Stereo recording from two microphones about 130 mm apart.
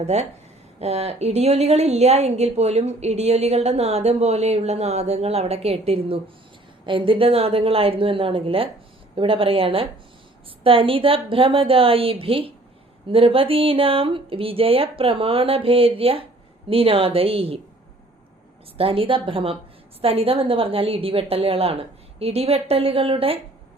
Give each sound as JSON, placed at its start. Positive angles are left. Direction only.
{"t": 0.0, "sound": "a woman's voice", "side_deg": -55}
{"t": 18.8, "sound": "a woman's voice", "side_deg": -45}